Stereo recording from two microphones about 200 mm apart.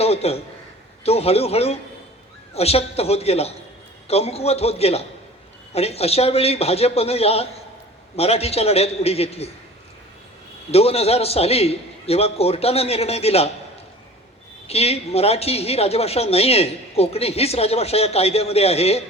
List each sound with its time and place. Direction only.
0.0 s a man's voice: 30° left (ahead or behind)
10.7 s a woman's voice: 30° left (ahead or behind)
14.7 s a woman's voice: 30° left (ahead or behind)